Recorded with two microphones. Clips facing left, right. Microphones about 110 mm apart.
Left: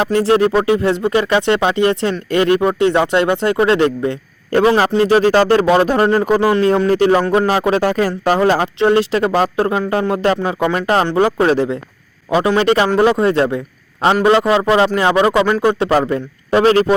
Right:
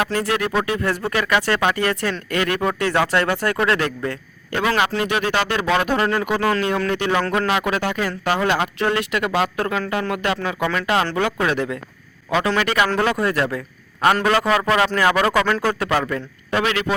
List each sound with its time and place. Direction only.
0.0 s speech: 30° left (ahead or behind)
4.5 s speech: 40° left (ahead or behind)
6.4 s speech: 25° left (ahead or behind)
6.7 s speech: 35° left (ahead or behind)